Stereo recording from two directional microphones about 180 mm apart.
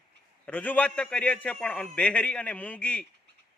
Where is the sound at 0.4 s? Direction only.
10° left (ahead or behind).